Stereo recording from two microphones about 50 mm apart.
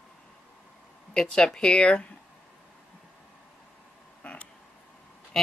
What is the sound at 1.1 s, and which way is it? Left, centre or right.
Speech, centre.